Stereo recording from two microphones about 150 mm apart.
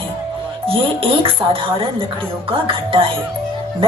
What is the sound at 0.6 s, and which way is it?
Speech, 40° right (ahead or behind).